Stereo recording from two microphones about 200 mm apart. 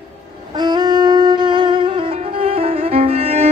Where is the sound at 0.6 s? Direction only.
20° right (ahead or behind).